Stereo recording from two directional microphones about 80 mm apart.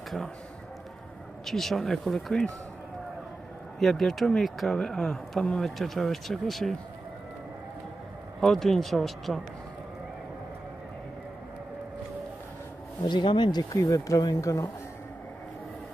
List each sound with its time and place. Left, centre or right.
1.4 s speech: centre
3.8 s speech: centre
8.4 s speech: centre
13.0 s speech: left
13.7 s speech: left